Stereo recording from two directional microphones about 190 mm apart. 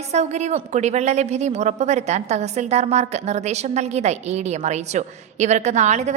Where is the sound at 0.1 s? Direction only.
35° right (ahead or behind).